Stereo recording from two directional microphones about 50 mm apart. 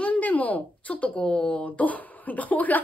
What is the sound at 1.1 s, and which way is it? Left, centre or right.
Speech, centre.